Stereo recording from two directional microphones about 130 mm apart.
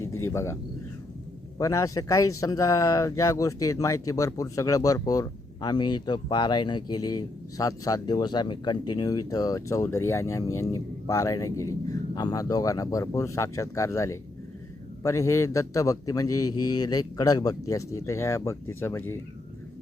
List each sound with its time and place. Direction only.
0.0 s speech: 20° left (ahead or behind)